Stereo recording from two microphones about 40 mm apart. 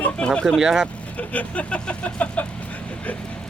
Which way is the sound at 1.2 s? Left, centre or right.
Left.